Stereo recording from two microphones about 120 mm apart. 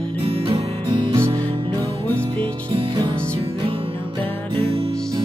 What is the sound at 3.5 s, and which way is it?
Music, 50° right (ahead or behind).